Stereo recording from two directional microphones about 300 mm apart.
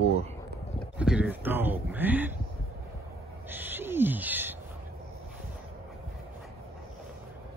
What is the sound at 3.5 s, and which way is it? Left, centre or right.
Bird, centre.